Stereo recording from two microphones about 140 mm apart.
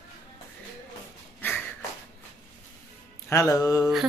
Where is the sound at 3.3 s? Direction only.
20° left (ahead or behind).